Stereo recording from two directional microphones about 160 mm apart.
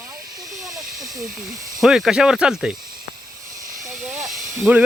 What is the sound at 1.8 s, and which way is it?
Speech, centre (ahead or behind).